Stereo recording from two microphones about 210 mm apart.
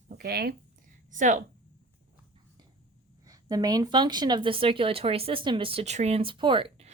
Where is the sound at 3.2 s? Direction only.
15° right (ahead or behind).